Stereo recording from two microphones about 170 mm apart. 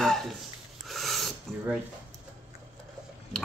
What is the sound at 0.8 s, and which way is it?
Filing, centre (ahead or behind).